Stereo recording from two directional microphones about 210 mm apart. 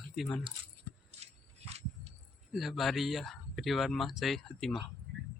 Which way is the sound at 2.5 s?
Centre (ahead or behind).